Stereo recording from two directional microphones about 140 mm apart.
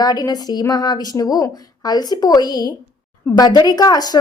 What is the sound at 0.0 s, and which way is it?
A woman's voice, 25° left (ahead or behind).